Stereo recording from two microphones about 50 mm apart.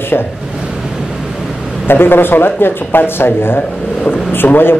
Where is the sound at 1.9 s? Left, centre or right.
Left.